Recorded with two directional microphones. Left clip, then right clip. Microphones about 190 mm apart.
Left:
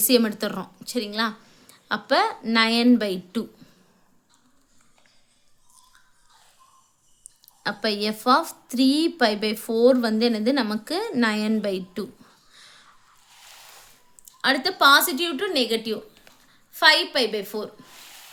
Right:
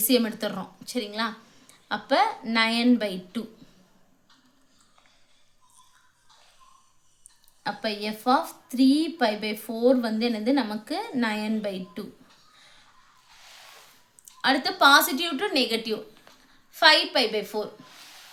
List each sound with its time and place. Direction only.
0.0 s a woman's voice: 35° left (ahead or behind)
3.6 s a sound: 35° left (ahead or behind)
7.6 s a woman's voice: 40° left (ahead or behind)
14.4 s speech: 30° left (ahead or behind)